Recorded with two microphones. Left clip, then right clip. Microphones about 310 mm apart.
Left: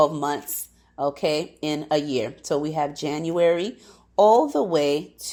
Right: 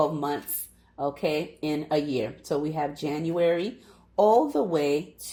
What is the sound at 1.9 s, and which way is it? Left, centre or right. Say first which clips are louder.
Speech: left 4 dB; left.